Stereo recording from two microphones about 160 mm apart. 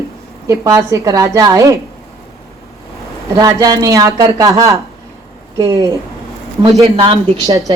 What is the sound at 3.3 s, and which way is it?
A woman's voice, 20° right (ahead or behind).